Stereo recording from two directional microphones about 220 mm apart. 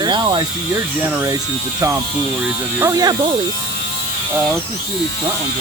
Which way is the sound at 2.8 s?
15° right (ahead or behind).